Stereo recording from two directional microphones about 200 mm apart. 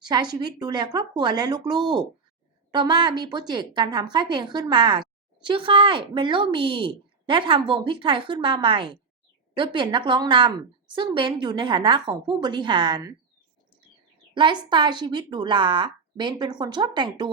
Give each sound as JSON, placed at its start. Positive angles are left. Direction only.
{"t": 0.0, "sound": "a woman's voice", "side_deg": -20}
{"t": 14.3, "sound": "a woman's voice", "side_deg": -25}